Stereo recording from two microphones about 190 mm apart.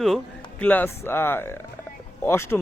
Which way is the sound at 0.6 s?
10° left (ahead or behind).